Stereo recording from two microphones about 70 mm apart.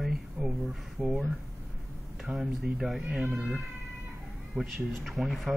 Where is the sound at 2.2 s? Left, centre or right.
Centre.